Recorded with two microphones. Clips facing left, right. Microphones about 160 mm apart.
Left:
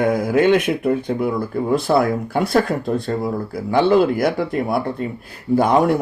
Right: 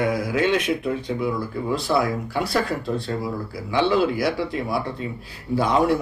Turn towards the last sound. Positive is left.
turn(degrees=50)  # may be behind; listen again after turning